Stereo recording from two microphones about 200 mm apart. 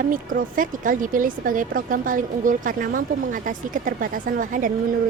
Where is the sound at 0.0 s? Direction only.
45° right (ahead or behind).